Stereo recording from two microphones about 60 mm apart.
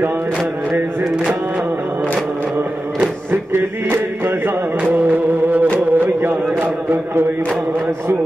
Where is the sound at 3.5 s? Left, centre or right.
Right.